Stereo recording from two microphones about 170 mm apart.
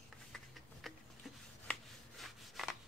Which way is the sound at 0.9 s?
Centre (ahead or behind).